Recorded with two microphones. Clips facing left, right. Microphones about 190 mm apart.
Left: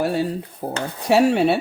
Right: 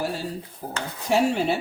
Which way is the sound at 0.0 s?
60° left (ahead or behind).